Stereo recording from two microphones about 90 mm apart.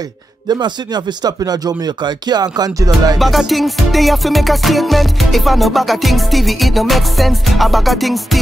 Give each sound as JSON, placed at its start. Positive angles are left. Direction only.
{"t": 0.5, "sound": "speech", "side_deg": -55}
{"t": 3.2, "sound": "music", "side_deg": 0}